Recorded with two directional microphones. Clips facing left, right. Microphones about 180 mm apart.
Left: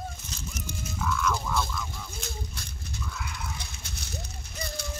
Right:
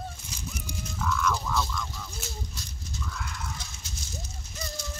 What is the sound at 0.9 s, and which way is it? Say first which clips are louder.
Goose: even; 5° left (ahead or behind).